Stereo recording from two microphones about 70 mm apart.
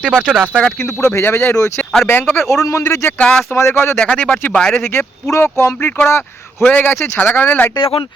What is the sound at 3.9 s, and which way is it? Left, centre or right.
Speech, left.